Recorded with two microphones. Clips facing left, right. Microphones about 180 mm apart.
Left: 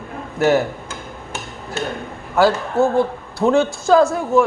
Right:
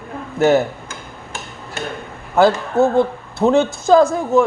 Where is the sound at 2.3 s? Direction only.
20° right (ahead or behind).